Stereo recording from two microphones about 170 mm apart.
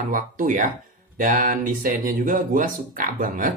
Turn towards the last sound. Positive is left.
turn(degrees=-50)  # may be behind; listen again after turning